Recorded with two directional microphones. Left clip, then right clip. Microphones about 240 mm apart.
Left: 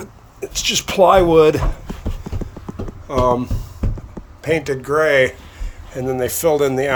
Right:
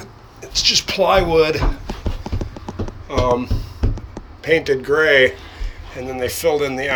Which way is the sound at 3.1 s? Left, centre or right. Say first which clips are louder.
Left 1 dB; left.